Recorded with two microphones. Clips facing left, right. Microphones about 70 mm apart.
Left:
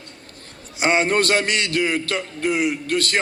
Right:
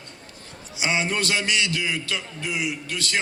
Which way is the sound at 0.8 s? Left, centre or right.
Left.